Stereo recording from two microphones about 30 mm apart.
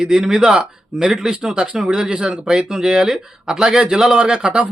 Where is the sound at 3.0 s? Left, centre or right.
Centre.